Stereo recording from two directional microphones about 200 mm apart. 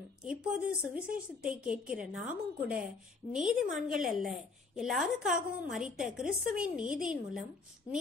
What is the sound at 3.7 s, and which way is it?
Speech, 40° right (ahead or behind).